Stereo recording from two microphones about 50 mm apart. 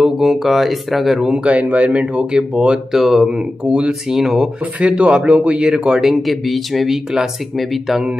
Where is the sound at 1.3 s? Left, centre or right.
Right.